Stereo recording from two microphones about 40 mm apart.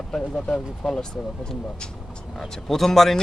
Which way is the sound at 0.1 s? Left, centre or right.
Centre.